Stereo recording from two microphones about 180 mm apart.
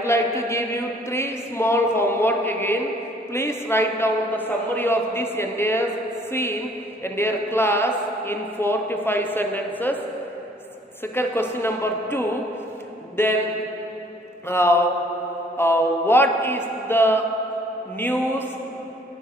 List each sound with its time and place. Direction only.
0.0 s a man's voice: 15° left (ahead or behind)
11.1 s a man's voice: 15° left (ahead or behind)
13.1 s mantra: 10° left (ahead or behind)
14.5 s a man's voice: 15° left (ahead or behind)